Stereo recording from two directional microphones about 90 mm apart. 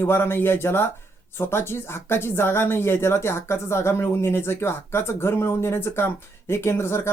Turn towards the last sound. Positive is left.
turn(degrees=30)  # may be behind; listen again after turning